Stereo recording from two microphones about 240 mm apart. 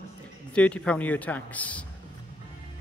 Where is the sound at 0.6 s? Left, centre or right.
Centre.